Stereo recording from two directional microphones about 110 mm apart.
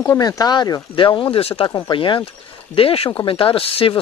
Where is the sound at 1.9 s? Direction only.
50° left (ahead or behind).